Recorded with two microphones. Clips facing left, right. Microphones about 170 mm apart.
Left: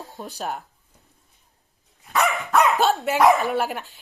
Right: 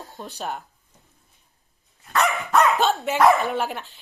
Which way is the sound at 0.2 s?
5° left (ahead or behind).